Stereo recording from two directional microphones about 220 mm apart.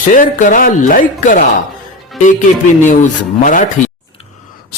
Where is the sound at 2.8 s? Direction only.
35° left (ahead or behind).